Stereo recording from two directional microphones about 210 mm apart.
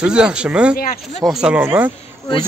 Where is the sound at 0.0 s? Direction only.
5° right (ahead or behind).